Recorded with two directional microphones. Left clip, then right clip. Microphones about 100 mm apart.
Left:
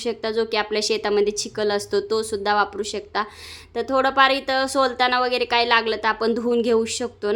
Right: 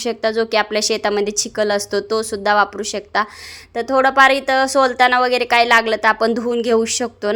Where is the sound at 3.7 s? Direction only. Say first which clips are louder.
Right 5 dB; 20° right (ahead or behind).